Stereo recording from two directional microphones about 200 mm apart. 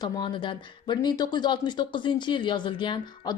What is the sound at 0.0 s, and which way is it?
Speech, 25° left (ahead or behind).